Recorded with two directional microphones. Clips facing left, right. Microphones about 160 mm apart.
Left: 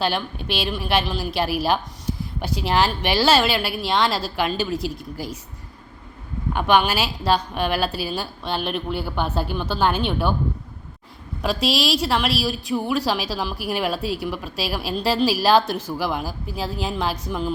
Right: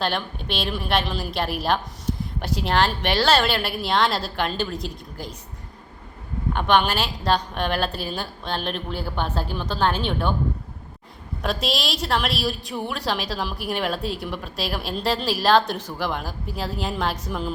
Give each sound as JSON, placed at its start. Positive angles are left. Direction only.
{"t": 0.0, "sound": "a woman's voice", "side_deg": 5}
{"t": 6.5, "sound": "a woman's voice", "side_deg": 5}
{"t": 11.4, "sound": "a woman's voice", "side_deg": 0}